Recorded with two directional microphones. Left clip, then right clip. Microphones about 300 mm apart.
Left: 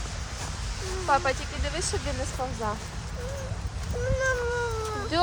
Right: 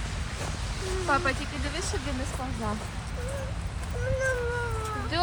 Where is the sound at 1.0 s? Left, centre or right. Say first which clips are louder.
Left 2 dB; left.